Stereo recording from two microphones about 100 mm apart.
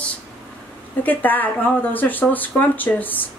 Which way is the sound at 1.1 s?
15° left (ahead or behind).